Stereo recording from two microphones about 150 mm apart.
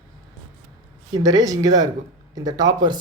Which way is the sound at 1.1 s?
25° right (ahead or behind).